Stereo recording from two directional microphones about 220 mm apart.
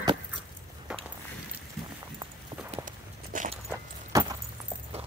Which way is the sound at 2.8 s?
35° right (ahead or behind).